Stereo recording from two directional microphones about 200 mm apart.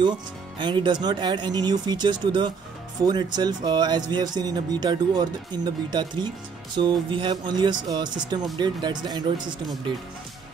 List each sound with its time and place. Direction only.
0.6 s speech: 25° right (ahead or behind)